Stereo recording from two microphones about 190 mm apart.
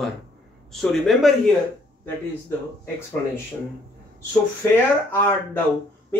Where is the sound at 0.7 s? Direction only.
Centre (ahead or behind).